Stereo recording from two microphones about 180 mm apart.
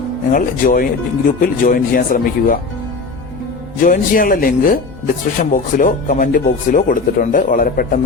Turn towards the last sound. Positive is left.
turn(degrees=50)  # may be behind; listen again after turning